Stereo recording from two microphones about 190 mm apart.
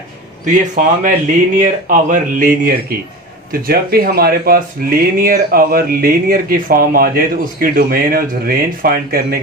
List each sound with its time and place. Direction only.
0.5 s speech: 45° right (ahead or behind)